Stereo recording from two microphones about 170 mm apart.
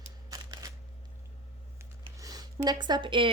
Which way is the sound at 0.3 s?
20° right (ahead or behind).